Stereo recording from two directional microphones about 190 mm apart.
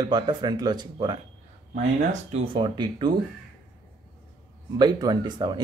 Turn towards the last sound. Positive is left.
turn(degrees=-20)  # may be behind; listen again after turning